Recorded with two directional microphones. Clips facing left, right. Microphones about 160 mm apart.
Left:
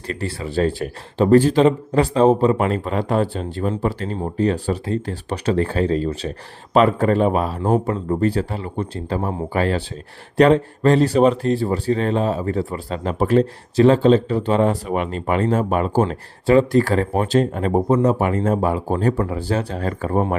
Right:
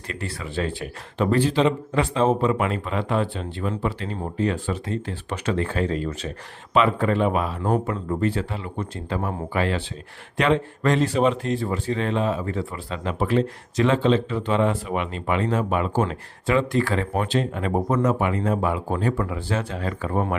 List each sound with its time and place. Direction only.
0.1 s speech: 35° left (ahead or behind)
17.8 s speech: 30° left (ahead or behind)